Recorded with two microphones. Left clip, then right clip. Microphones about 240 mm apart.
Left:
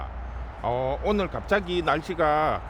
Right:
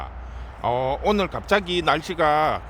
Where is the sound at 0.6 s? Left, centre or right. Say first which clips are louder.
Right 4 dB; centre.